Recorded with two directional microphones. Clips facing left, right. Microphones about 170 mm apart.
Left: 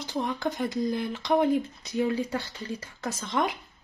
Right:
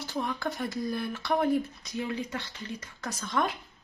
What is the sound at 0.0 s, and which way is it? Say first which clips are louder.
Speech: left 3 dB; 20° left (ahead or behind).